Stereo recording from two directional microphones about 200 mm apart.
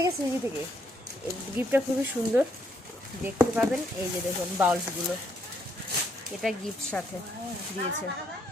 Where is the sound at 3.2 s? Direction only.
5° right (ahead or behind).